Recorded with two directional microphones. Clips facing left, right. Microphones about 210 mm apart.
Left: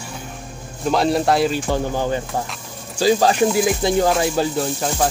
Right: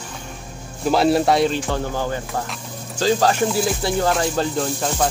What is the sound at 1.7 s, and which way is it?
Speech, 15° left (ahead or behind).